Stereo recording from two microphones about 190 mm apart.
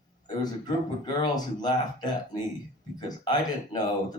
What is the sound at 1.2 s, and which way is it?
Speech, 20° left (ahead or behind).